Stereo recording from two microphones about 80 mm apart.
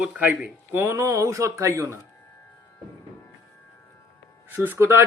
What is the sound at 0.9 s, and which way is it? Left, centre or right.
Speech, right.